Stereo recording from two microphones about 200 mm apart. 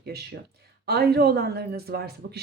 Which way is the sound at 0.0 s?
55° right (ahead or behind).